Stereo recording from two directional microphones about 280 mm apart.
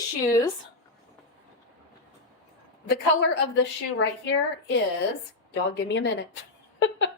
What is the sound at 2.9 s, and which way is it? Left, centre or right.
A woman's voice, left.